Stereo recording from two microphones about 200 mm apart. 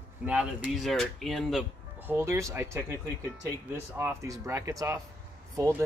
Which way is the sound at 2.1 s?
15° right (ahead or behind).